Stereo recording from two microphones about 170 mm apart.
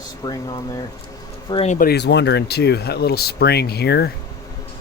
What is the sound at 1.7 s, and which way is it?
Speech, 65° left (ahead or behind).